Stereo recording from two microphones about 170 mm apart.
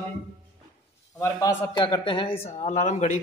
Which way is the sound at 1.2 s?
25° left (ahead or behind).